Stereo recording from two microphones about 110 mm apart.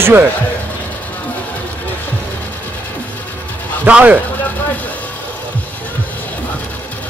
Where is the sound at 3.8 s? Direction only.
15° right (ahead or behind).